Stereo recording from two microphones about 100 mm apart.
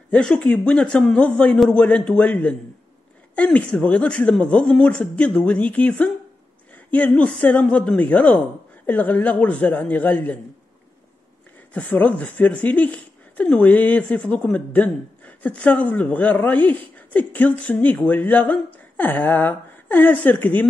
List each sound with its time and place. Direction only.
0.1 s speech: 10° left (ahead or behind)
11.7 s speech: 15° left (ahead or behind)